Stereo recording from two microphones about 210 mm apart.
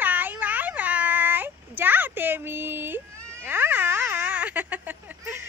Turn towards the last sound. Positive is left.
turn(degrees=-10)  # may be behind; listen again after turning